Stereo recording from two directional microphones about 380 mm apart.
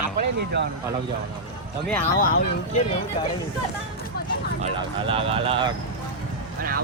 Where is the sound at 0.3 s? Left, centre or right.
Right.